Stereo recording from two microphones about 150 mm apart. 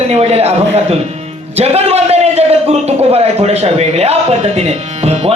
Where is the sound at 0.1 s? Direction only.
45° right (ahead or behind).